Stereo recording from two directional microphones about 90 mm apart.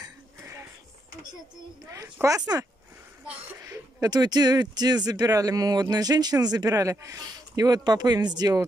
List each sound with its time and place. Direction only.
2.2 s speech: 40° right (ahead or behind)
3.6 s speech: 45° right (ahead or behind)